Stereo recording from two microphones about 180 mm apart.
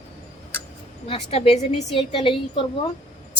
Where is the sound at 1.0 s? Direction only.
35° left (ahead or behind).